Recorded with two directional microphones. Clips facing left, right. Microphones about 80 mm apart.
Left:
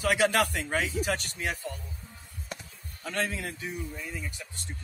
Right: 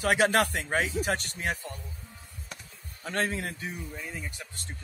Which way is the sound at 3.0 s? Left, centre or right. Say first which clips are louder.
Right 2 dB; right.